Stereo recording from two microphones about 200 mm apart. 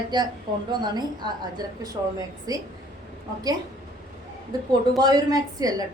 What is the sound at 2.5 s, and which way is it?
Speech, 20° right (ahead or behind).